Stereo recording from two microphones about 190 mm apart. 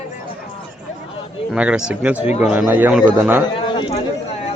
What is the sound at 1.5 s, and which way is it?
Speech, 5° right (ahead or behind).